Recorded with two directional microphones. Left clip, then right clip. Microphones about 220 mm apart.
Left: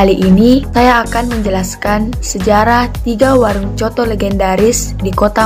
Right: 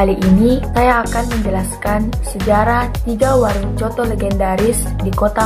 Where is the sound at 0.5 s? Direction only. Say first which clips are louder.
Left 4 dB; 30° left (ahead or behind).